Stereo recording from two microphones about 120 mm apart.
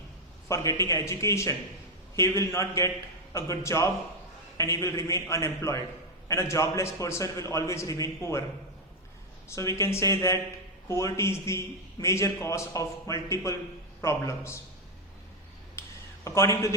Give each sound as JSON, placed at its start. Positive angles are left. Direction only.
{"t": 0.4, "sound": "a man's voice", "side_deg": 25}
{"t": 9.5, "sound": "a man's voice", "side_deg": 25}
{"t": 15.8, "sound": "a sound", "side_deg": 20}
{"t": 16.2, "sound": "a man's voice", "side_deg": 25}